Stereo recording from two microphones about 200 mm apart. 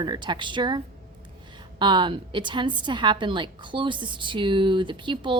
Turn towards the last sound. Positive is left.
turn(degrees=-25)  # may be behind; listen again after turning